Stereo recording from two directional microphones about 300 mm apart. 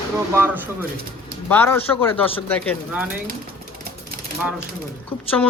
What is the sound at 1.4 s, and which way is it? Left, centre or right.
Speech, centre.